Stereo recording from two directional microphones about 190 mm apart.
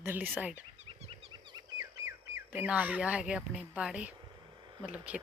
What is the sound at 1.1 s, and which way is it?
Wild animals, 25° right (ahead or behind).